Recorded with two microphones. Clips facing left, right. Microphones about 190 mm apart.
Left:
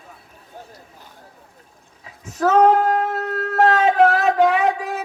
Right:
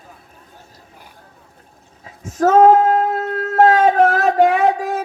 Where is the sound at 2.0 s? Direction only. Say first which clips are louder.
Right 4 dB; 45° right (ahead or behind).